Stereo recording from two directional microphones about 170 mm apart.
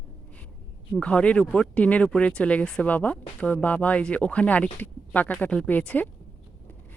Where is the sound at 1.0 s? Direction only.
5° left (ahead or behind).